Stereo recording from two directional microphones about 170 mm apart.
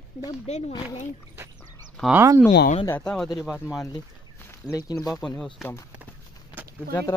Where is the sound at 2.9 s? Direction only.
5° left (ahead or behind).